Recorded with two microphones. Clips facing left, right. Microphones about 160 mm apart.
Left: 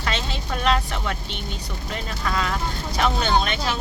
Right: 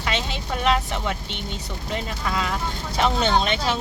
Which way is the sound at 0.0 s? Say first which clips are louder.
Right 1 dB; 15° right (ahead or behind).